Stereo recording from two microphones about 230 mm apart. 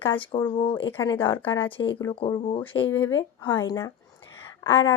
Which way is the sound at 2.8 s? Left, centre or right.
Centre.